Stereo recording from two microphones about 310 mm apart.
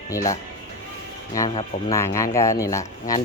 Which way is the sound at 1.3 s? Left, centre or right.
Centre.